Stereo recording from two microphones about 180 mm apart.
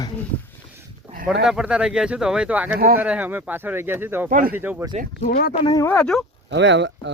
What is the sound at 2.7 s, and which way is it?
Speech, 55° right (ahead or behind).